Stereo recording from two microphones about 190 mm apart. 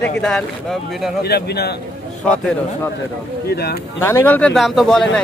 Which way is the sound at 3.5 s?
55° left (ahead or behind).